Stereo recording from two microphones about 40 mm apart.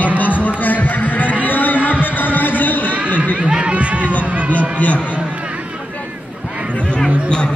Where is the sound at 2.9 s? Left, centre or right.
Right.